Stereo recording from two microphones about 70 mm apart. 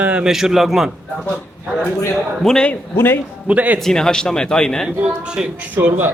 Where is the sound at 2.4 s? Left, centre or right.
Centre.